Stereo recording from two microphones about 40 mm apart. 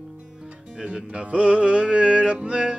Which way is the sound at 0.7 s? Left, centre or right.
Right.